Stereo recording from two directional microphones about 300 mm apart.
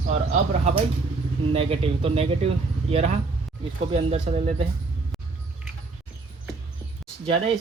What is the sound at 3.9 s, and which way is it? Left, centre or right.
Speech, right.